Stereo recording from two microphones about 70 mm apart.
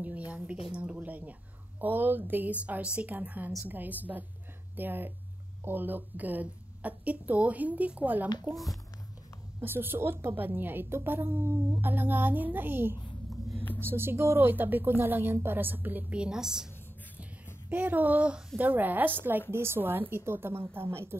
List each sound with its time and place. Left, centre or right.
0.0 s a woman's voice: right
9.6 s a woman's voice: right
16.2 s a woman's voice: centre
17.6 s a woman's voice: right